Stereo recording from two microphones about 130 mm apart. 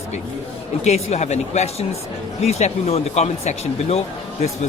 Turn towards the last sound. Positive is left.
turn(degrees=55)  # may be behind; listen again after turning